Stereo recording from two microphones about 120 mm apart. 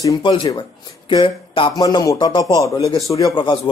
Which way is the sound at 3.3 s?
40° left (ahead or behind).